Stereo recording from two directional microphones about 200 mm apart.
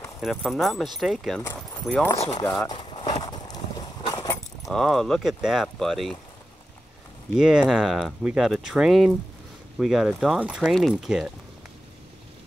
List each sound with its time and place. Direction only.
0.2 s speech: centre (ahead or behind)
2.7 s clip-clop: 25° left (ahead or behind)
4.6 s speech: centre (ahead or behind)
7.3 s speech: 5° right (ahead or behind)